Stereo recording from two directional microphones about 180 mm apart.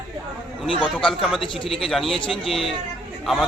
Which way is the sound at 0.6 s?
30° left (ahead or behind).